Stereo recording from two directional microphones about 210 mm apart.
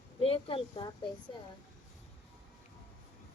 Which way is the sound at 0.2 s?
25° left (ahead or behind).